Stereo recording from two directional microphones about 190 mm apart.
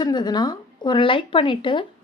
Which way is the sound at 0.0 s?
20° left (ahead or behind).